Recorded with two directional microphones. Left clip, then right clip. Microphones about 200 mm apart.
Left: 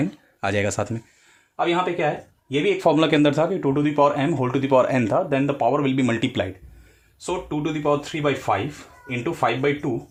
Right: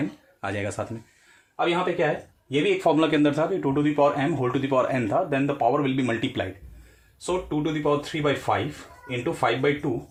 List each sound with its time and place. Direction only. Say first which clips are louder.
0.4 s a man's voice: left 6 dB; 50° left (ahead or behind)
7.3 s speech: even; 35° left (ahead or behind)